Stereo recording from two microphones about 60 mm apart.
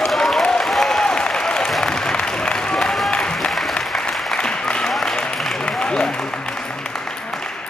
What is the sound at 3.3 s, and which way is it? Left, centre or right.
Music, centre.